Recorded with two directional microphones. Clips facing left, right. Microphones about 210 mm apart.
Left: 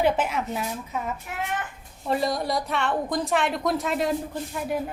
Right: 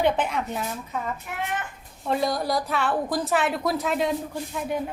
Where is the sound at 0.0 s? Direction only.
5° left (ahead or behind).